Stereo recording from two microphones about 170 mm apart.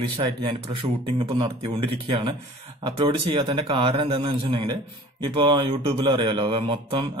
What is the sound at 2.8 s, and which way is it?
Speech, 30° right (ahead or behind).